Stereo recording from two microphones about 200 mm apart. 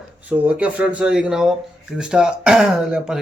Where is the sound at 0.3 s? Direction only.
5° right (ahead or behind).